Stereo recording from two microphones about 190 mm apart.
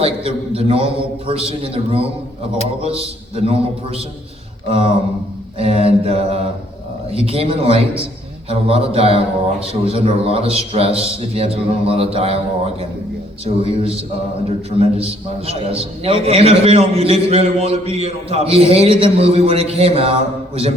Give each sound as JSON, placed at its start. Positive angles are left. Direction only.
{"t": 0.0, "sound": "a man's voice", "side_deg": -30}
{"t": 5.5, "sound": "a man's voice", "side_deg": -30}